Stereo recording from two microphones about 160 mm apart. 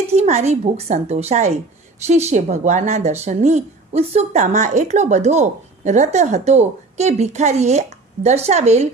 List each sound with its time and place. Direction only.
0.1 s speech: 45° right (ahead or behind)